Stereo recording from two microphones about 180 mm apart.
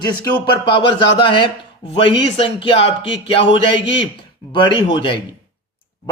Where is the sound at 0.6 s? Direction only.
30° left (ahead or behind).